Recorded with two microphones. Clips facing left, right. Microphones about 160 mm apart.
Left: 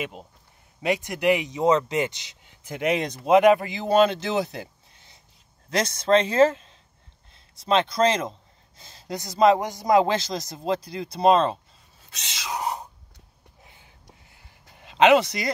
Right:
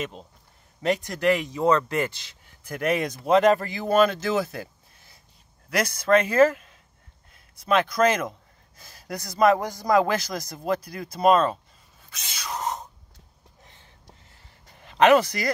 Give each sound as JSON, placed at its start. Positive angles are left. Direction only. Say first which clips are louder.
{"t": 0.0, "sound": "a man's voice", "louder": "even", "side_deg": 10}
{"t": 12.4, "sound": "a sound", "louder": "left 1 dB", "side_deg": 10}
{"t": 14.8, "sound": "speech", "louder": "even", "side_deg": 20}